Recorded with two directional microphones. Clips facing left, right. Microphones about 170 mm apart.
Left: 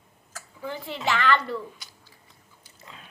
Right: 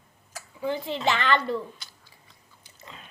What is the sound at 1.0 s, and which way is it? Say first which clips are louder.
Speech: left 1 dB; 20° right (ahead or behind).